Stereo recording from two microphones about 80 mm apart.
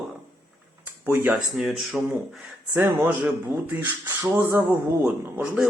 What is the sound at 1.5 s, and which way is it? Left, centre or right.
Speech, centre.